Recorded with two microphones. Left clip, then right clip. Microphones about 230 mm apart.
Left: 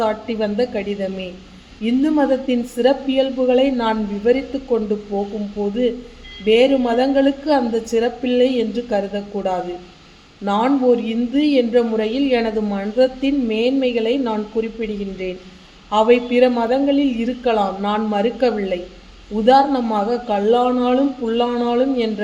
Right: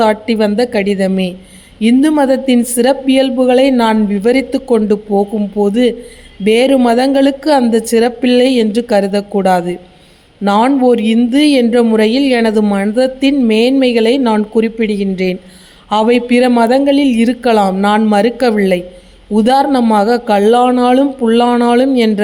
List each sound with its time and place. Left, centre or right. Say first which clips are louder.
0.0 s speech: right 8 dB; right